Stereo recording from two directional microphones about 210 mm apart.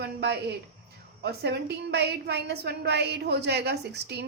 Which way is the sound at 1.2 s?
50° right (ahead or behind).